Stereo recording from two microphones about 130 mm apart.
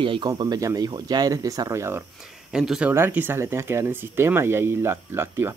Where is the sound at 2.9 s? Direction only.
15° right (ahead or behind).